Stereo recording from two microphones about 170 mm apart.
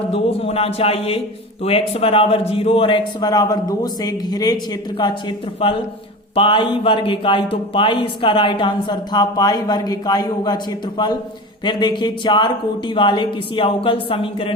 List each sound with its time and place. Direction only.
0.1 s a woman's voice: 35° left (ahead or behind)
6.3 s a man's voice: 30° left (ahead or behind)